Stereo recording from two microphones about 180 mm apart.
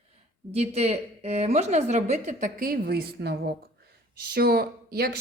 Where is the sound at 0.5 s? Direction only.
35° right (ahead or behind).